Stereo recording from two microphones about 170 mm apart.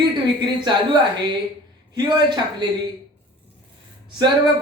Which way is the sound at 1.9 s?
25° right (ahead or behind).